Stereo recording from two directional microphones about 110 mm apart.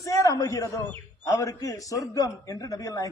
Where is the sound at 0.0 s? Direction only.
30° left (ahead or behind).